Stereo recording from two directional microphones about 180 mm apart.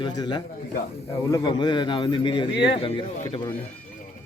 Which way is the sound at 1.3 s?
25° left (ahead or behind).